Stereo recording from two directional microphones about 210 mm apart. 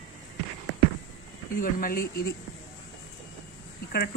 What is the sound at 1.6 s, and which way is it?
Speech, 45° left (ahead or behind).